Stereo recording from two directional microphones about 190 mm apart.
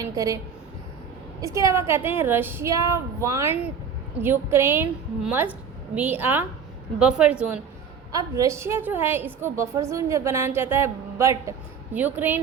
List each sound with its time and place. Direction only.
0.0 s a woman's voice: 15° right (ahead or behind)
1.4 s a woman's voice: 15° right (ahead or behind)